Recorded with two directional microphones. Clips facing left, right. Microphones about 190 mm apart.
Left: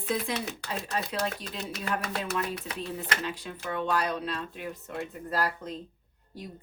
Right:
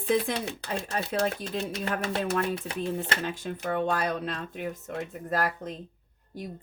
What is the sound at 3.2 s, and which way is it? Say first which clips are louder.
A woman's voice: right 4 dB; 45° right (ahead or behind).